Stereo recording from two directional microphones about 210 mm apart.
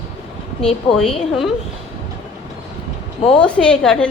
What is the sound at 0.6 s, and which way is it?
Speech, 30° left (ahead or behind).